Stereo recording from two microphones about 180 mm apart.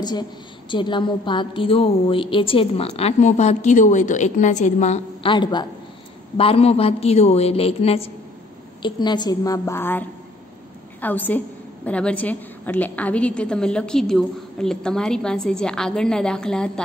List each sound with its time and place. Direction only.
0.0 s a woman's voice: 25° left (ahead or behind); by 16.8 s 5° left (ahead or behind)